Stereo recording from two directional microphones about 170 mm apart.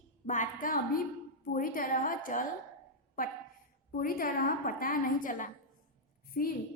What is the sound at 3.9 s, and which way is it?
A woman's voice, 60° left (ahead or behind).